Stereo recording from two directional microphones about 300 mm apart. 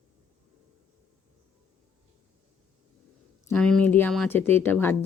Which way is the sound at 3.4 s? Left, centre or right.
Centre.